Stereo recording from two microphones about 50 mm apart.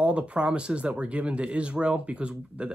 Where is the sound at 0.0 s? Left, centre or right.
Right.